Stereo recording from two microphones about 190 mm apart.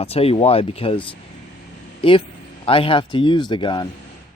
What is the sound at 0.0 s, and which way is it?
Speech, 30° left (ahead or behind).